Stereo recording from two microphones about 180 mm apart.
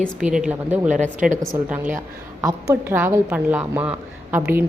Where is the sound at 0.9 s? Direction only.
45° right (ahead or behind).